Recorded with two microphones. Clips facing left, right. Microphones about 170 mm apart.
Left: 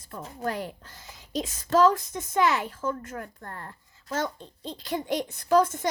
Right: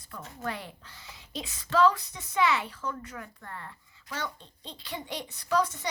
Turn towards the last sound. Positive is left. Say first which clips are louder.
# left 6 dB
turn(degrees=50)  # may be behind; listen again after turning